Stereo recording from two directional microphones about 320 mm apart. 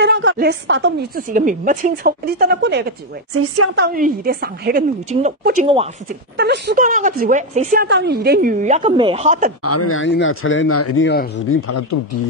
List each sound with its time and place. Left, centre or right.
0.0 s a woman's voice: right
6.3 s speech: right
9.6 s speech: left